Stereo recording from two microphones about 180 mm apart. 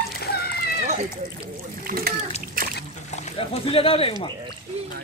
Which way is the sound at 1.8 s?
55° right (ahead or behind).